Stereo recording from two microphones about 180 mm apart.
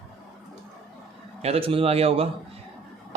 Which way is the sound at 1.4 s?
35° right (ahead or behind).